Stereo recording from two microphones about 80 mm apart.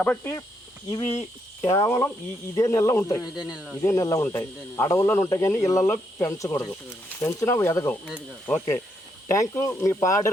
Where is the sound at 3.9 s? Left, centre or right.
Left.